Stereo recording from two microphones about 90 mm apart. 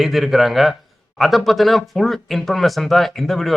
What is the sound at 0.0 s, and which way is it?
Speech, centre (ahead or behind).